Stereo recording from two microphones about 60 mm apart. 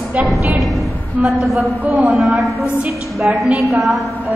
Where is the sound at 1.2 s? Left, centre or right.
Centre.